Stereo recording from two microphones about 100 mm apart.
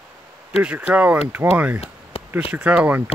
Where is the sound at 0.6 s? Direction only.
10° right (ahead or behind).